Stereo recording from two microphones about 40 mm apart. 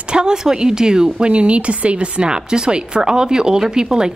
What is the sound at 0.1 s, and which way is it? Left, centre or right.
A woman's voice, centre.